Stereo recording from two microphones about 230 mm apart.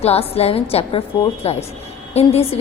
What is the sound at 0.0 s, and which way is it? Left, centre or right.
A woman's voice, left.